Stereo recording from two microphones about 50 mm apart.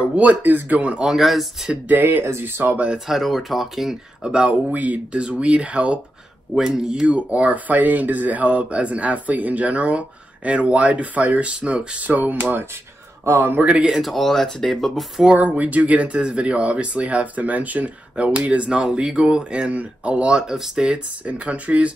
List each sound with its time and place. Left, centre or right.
0.1 s speech: right
0.7 s speech: right
1.0 s speech: centre
1.9 s speech: right
3.1 s speech: centre
4.2 s speech: centre
4.5 s speech: right
6.5 s speech: centre; by 12.6 s right
13.2 s speech: right
13.7 s speech: right
13.9 s speech: centre
15.3 s speech: right